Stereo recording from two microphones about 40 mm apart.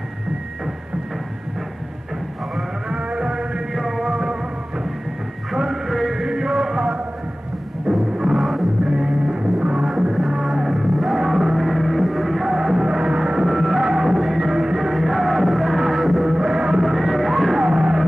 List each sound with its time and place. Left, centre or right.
2.9 s music: right
3.7 s music: centre
4.1 s music: centre
5.6 s music: centre
6.2 s music: centre
7.9 s music: centre
8.8 s music: centre
9.4 s music: right
10.5 s music: centre
13.5 s music: centre
16.3 s music: centre
16.8 s music: centre
17.6 s music: centre